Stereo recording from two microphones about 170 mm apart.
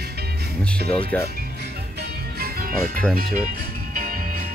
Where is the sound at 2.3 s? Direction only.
60° right (ahead or behind).